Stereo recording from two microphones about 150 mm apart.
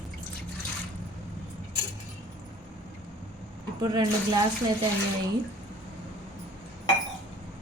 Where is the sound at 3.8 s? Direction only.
30° right (ahead or behind).